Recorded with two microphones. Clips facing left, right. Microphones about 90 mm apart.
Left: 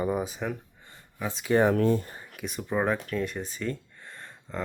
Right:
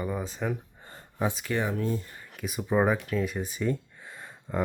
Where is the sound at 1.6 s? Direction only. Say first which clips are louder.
Left 8 dB; 70° left (ahead or behind).